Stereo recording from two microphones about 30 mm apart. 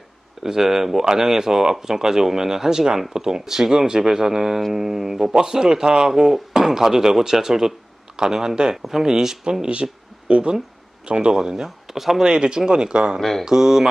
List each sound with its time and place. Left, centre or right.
0.4 s speech: centre
5.3 s speech: right
8.7 s speech: centre
10.2 s speech: right
11.3 s speech: centre
12.2 s speech: right